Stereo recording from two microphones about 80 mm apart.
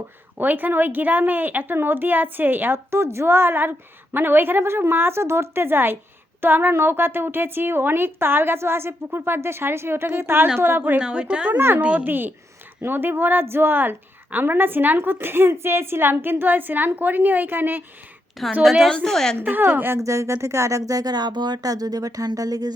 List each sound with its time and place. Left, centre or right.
0.3 s a woman's voice: right
11.5 s a woman's voice: right
11.8 s a woman's voice: centre
18.6 s a woman's voice: centre
19.4 s a woman's voice: right
20.0 s speech: right